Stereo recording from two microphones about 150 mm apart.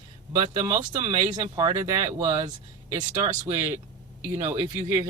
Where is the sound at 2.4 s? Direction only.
55° right (ahead or behind).